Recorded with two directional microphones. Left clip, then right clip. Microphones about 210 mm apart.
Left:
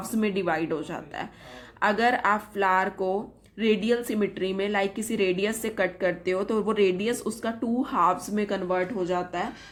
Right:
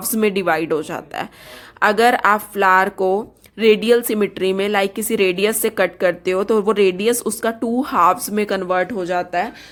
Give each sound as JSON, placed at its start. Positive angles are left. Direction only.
{"t": 0.2, "sound": "a woman's voice", "side_deg": -40}